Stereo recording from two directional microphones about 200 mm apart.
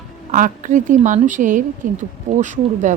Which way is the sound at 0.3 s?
40° right (ahead or behind).